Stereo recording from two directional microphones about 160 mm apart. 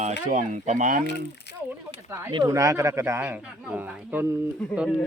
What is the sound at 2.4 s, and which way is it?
Speech, 20° right (ahead or behind).